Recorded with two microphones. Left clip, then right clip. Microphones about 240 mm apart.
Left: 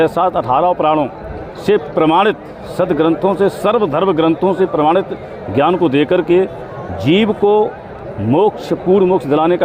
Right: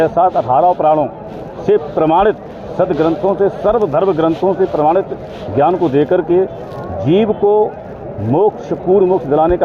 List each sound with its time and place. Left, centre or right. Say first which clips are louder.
0.0 s a man's voice: right 2 dB; left
8.9 s a man's voice: right 1 dB; left